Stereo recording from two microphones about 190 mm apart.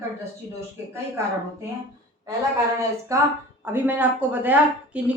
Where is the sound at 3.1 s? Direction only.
15° right (ahead or behind).